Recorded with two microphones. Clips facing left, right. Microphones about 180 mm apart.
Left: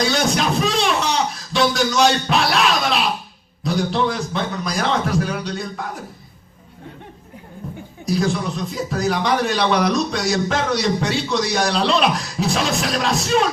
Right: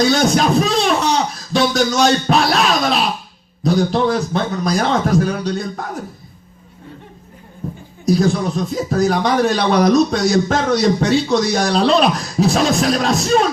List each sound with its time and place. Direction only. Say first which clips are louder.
0.1 s a sound: right 5 dB; 40° right (ahead or behind)
1.5 s a man's voice: right 2 dB; 40° right (ahead or behind)
8.0 s speech: right 5 dB; 40° right (ahead or behind)